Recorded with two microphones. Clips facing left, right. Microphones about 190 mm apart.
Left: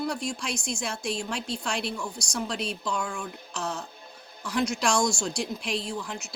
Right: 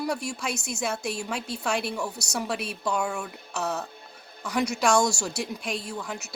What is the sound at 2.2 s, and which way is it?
A woman's voice, 5° right (ahead or behind).